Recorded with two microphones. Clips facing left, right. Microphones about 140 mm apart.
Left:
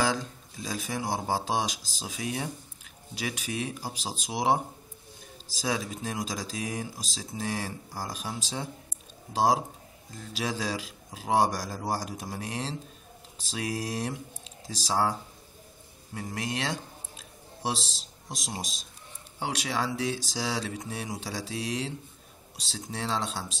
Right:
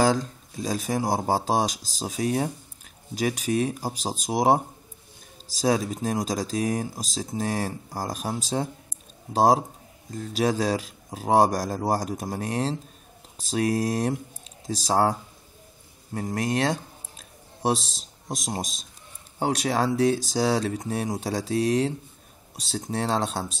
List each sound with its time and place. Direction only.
0.0 s speech: 40° right (ahead or behind)
5.6 s speech: 45° right (ahead or behind)
17.2 s a sound: 50° right (ahead or behind)
17.8 s speech: 50° right (ahead or behind)